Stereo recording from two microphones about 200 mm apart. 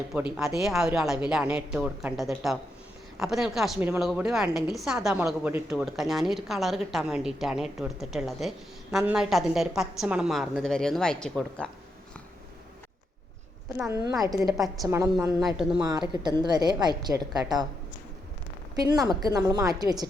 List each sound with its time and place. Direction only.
0.3 s speech: centre (ahead or behind)
13.7 s a woman's voice: 15° right (ahead or behind)
14.1 s speech: centre (ahead or behind)
14.8 s a woman's voice: 15° right (ahead or behind)
19.2 s a woman's voice: 20° right (ahead or behind)